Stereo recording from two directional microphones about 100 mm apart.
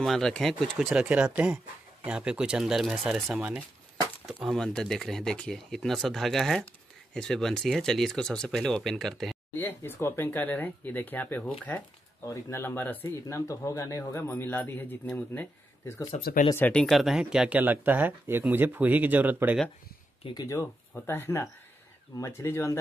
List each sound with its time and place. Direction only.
0.0 s speech: 5° left (ahead or behind)
1.0 s speech: 15° right (ahead or behind)
4.3 s speech: centre (ahead or behind)
9.5 s speech: 20° left (ahead or behind)
13.1 s speech: 30° left (ahead or behind)
14.3 s a man's voice: 15° left (ahead or behind)
16.7 s speech: centre (ahead or behind); by 19.6 s 15° right (ahead or behind)
20.3 s speech: 30° left (ahead or behind)